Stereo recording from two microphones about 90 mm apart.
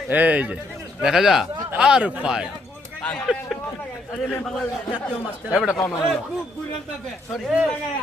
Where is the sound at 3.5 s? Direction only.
Centre (ahead or behind).